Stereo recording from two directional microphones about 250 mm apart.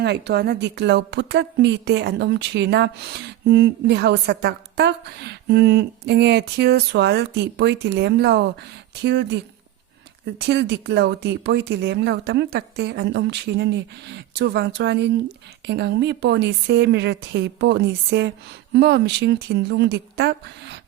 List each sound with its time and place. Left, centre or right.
0.0 s a woman's voice: right